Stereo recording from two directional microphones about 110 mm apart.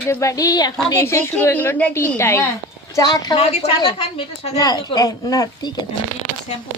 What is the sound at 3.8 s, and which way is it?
Speech, 50° left (ahead or behind).